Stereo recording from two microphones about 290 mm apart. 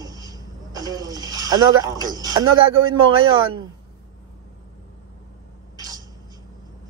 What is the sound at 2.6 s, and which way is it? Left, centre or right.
Speech, right.